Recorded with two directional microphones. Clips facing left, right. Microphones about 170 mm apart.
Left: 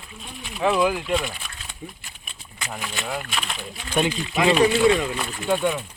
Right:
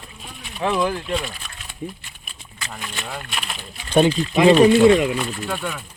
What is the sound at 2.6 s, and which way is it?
Speech, 5° left (ahead or behind).